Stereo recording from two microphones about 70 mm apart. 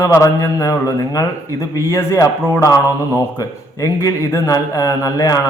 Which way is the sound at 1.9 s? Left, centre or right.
Left.